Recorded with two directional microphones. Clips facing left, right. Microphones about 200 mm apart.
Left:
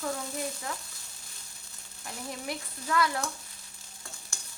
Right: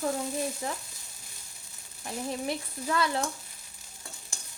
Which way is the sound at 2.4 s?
25° right (ahead or behind).